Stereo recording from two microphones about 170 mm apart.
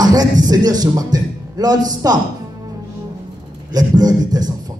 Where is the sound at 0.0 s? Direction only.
20° right (ahead or behind).